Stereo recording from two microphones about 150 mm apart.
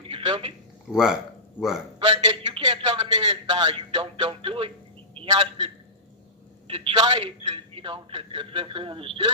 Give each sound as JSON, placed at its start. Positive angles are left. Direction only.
{"t": 0.0, "sound": "a sound", "side_deg": -35}
{"t": 0.9, "sound": "speech", "side_deg": -5}
{"t": 2.0, "sound": "a man's voice", "side_deg": -30}